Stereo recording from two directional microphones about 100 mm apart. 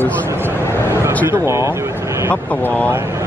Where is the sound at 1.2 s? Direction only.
30° right (ahead or behind).